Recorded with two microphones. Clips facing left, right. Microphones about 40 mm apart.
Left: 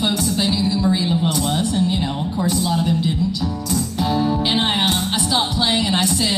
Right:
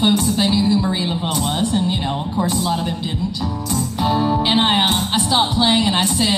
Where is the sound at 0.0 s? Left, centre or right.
Centre.